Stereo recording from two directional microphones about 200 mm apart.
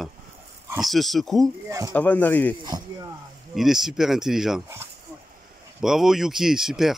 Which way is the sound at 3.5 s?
Centre (ahead or behind).